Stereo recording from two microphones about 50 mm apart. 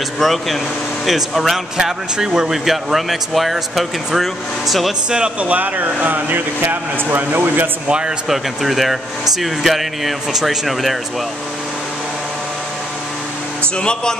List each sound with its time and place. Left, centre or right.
0.2 s speech: centre
5.4 s speech: right
8.3 s speech: centre
13.7 s music: centre